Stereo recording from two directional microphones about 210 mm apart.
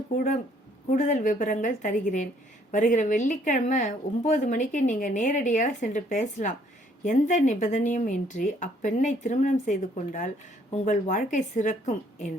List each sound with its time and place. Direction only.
0.9 s a woman's voice: 35° left (ahead or behind)